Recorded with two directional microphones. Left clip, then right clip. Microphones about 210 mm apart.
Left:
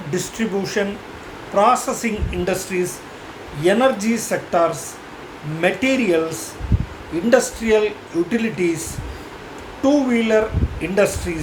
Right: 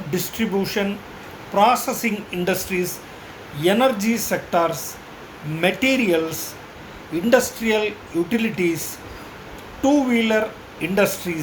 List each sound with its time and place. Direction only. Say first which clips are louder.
0.1 s speech: left 1 dB; 5° left (ahead or behind)
9.8 s speech: left 1 dB; 5° left (ahead or behind)